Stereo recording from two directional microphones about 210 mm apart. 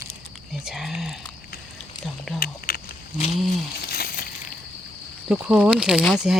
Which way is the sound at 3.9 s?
45° left (ahead or behind).